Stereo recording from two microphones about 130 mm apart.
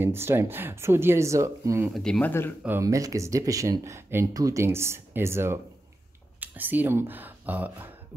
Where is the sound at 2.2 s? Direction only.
15° left (ahead or behind).